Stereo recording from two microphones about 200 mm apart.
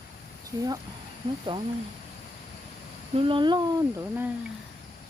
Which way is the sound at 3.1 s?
25° right (ahead or behind).